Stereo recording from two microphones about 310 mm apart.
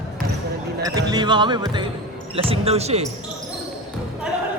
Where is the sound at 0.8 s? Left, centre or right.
Centre.